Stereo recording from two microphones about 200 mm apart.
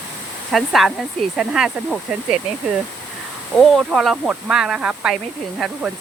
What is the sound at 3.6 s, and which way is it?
Speech, centre (ahead or behind).